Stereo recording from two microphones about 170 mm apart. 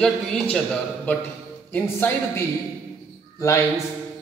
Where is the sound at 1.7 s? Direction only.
10° left (ahead or behind).